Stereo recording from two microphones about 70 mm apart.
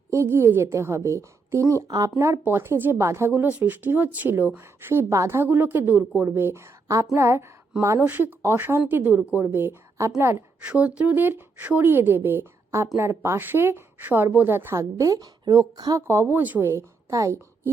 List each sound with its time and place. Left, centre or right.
0.1 s a woman's voice: right
3.0 s a woman's voice: right
3.3 s speech: right
5.0 s a woman's voice: right
5.4 s speech: right
6.8 s a woman's voice: right
8.0 s a woman's voice: right
10.7 s speech: centre
13.0 s a woman's voice: right
14.8 s a woman's voice: right
15.4 s speech: right
16.0 s a woman's voice: right
16.2 s speech: right
16.6 s a woman's voice: right